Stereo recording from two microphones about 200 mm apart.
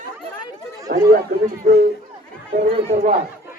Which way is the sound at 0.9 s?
45° right (ahead or behind).